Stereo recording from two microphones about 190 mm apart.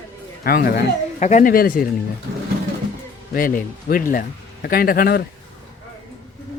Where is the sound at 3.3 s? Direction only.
45° left (ahead or behind).